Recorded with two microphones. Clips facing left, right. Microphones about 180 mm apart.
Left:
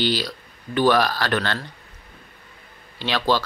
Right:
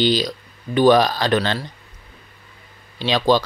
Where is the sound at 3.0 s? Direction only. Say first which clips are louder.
Right 5 dB; 15° right (ahead or behind).